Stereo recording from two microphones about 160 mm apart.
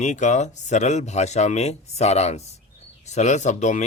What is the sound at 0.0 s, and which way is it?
Speech, 45° left (ahead or behind).